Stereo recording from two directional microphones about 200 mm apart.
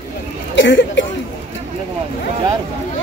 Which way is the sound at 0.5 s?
65° left (ahead or behind).